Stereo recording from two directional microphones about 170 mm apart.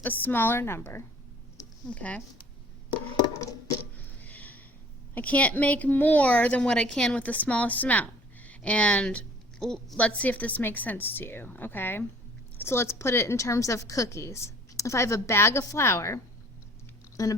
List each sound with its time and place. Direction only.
0.0 s a woman's voice: 10° left (ahead or behind)
2.9 s a sound: 20° left (ahead or behind)
5.1 s a woman's voice: 10° left (ahead or behind)